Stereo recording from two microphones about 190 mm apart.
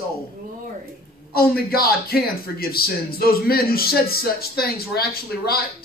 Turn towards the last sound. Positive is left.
turn(degrees=55)  # may be behind; listen again after turning